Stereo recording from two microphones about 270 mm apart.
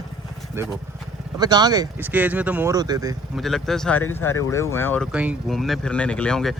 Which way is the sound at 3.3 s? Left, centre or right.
Centre.